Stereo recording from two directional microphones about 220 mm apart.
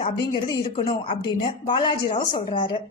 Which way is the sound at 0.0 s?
25° left (ahead or behind).